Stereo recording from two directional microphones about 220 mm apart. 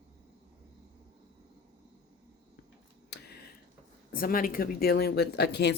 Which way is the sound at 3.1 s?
45° left (ahead or behind).